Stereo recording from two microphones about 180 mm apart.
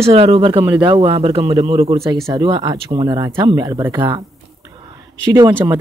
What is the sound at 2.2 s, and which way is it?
Speech, 20° right (ahead or behind).